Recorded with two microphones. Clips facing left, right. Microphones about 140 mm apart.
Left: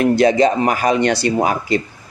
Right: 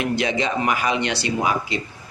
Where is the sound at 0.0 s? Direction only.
40° left (ahead or behind).